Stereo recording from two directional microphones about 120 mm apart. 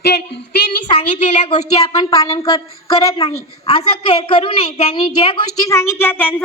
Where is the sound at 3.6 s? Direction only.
55° left (ahead or behind).